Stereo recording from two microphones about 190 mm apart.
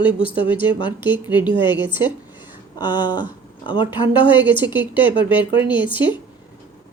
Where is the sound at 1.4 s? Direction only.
25° left (ahead or behind).